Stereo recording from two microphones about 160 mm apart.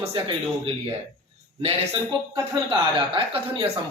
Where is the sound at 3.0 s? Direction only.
30° right (ahead or behind).